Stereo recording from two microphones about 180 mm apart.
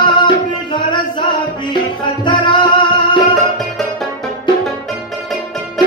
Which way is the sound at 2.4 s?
25° left (ahead or behind).